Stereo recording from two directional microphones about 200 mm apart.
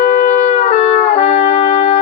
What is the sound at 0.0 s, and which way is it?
Trumpet, 40° left (ahead or behind).